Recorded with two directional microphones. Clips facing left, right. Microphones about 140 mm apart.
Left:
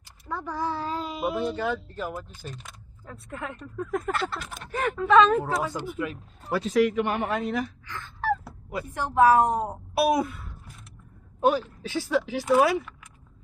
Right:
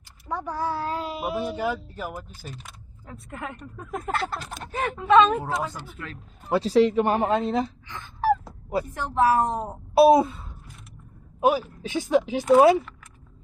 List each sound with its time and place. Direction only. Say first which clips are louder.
0.3 s speech: right 2 dB; 15° right (ahead or behind)
5.6 s a woman's voice: left 5 dB; 15° left (ahead or behind)
6.5 s speech: right 3 dB; 30° right (ahead or behind)
9.0 s a woman's voice: left 3 dB; 15° left (ahead or behind)
9.9 s speech: right 8 dB; 25° right (ahead or behind)
11.3 s speech: right 1 dB; 10° right (ahead or behind)